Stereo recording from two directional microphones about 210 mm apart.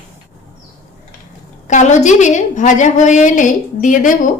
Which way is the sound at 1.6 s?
35° left (ahead or behind).